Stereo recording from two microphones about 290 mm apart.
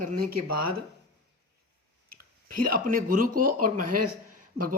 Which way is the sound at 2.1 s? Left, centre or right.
Right.